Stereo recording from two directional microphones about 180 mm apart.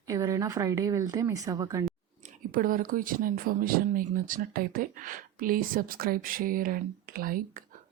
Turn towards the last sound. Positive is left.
turn(degrees=-50)  # may be behind; listen again after turning